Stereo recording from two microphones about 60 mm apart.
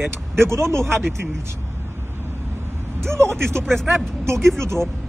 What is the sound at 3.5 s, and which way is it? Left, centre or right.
Speech, centre.